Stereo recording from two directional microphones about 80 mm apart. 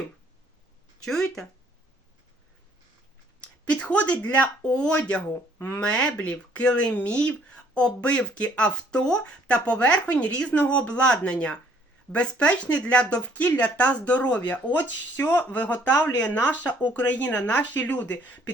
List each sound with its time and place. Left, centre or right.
3.4 s speech: centre
5.8 s speech: centre